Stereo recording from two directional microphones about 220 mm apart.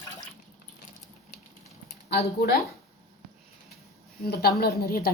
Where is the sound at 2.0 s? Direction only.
45° left (ahead or behind).